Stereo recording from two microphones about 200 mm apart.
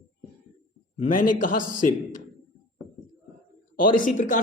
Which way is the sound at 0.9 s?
40° left (ahead or behind).